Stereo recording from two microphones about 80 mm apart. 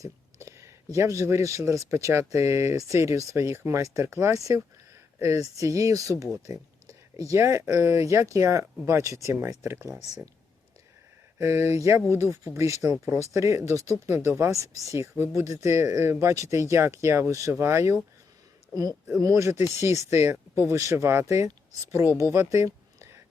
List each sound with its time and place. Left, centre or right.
0.0 s speech: right
11.3 s speech: right
19.1 s speech: right
22.2 s a sound: right